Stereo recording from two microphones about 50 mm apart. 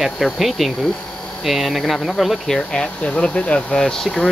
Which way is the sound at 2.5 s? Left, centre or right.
Left.